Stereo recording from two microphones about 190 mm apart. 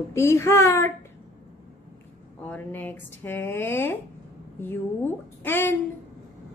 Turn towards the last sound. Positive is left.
turn(degrees=10)  # may be behind; listen again after turning